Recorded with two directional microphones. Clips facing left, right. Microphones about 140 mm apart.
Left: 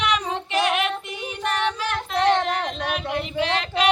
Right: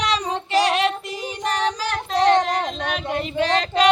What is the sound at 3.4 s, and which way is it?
Female singing, 40° right (ahead or behind).